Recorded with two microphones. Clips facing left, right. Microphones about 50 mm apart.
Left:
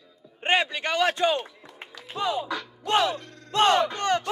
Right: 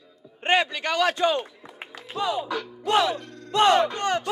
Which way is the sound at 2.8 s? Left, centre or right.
Left.